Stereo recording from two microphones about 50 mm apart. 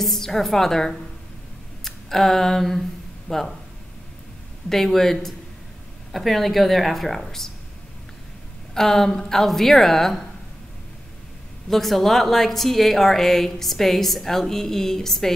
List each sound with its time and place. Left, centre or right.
0.0 s a woman's voice: centre
1.9 s a sound: centre
3.3 s speech: centre
4.6 s a woman's voice: centre
8.7 s a woman's voice: centre
11.7 s a woman's voice: centre